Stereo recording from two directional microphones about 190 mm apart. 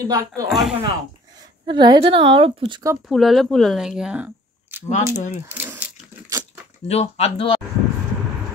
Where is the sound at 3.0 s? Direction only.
Centre (ahead or behind).